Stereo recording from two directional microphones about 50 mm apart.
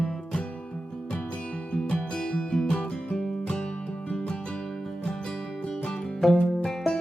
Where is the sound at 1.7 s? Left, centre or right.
Centre.